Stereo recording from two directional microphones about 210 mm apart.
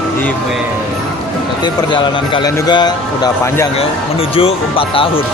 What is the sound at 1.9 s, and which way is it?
A man's voice, 20° left (ahead or behind).